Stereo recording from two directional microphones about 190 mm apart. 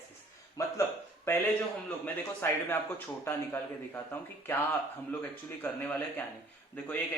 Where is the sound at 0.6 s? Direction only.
20° left (ahead or behind).